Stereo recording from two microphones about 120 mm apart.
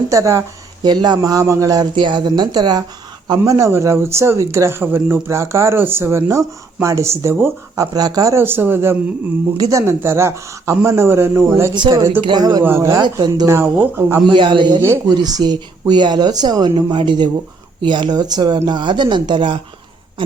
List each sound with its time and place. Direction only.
0.1 s speech: 25° right (ahead or behind)
0.9 s a woman's voice: 35° right (ahead or behind); by 7.9 s 20° right (ahead or behind)
7.9 s speech: 30° right (ahead or behind)
11.7 s a woman's voice: 40° right (ahead or behind)
12.6 s speech: 20° right (ahead or behind)
13.0 s a woman's voice: 35° right (ahead or behind)
13.5 s speech: 20° right (ahead or behind)
14.3 s a woman's voice: 40° right (ahead or behind)
14.8 s speech: 20° right (ahead or behind)
15.1 s a woman's voice: 35° right (ahead or behind)